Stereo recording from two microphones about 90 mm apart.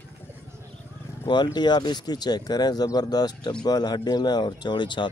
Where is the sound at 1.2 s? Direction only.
55° left (ahead or behind).